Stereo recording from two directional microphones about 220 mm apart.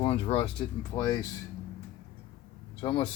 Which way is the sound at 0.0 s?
25° left (ahead or behind).